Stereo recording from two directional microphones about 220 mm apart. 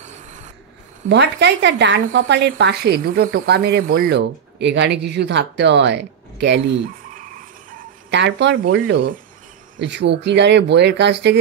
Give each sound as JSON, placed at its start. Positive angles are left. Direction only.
{"t": 1.0, "sound": "speech", "side_deg": -50}
{"t": 7.7, "sound": "a sound", "side_deg": -50}
{"t": 8.7, "sound": "speech", "side_deg": -50}